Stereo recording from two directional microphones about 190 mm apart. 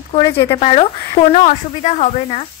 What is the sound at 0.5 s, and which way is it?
Speech, 30° left (ahead or behind).